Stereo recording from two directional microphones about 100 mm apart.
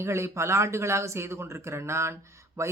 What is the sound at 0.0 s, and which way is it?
Speech, 25° right (ahead or behind).